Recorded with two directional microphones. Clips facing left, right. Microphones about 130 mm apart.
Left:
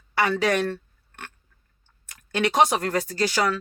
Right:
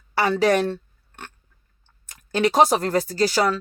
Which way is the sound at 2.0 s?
35° right (ahead or behind).